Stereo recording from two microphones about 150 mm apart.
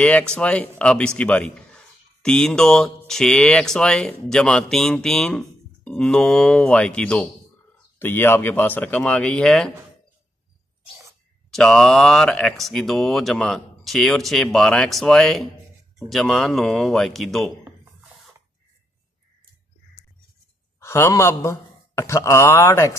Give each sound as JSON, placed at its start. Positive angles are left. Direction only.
{"t": 0.0, "sound": "speech", "side_deg": 5}
{"t": 11.5, "sound": "speech", "side_deg": 5}
{"t": 20.8, "sound": "speech", "side_deg": 20}